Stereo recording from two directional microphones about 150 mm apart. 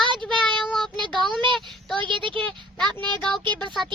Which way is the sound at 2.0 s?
35° right (ahead or behind).